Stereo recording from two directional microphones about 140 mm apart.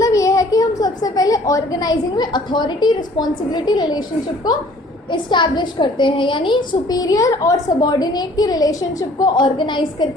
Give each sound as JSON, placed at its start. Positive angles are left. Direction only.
{"t": 0.0, "sound": "a woman's voice", "side_deg": 25}
{"t": 5.1, "sound": "a woman's voice", "side_deg": 35}